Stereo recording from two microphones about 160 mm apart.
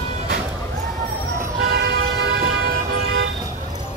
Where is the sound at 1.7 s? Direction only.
90° right.